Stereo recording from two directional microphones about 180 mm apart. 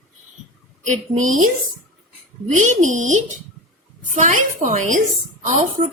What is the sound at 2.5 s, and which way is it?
A woman's voice, 40° right (ahead or behind).